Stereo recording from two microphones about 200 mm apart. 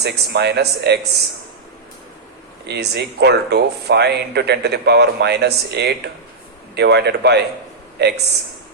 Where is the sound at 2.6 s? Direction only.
55° right (ahead or behind).